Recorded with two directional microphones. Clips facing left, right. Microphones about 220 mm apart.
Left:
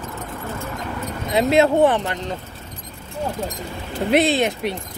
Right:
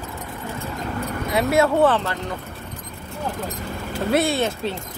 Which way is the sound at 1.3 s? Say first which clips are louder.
Left 3 dB; 20° left (ahead or behind).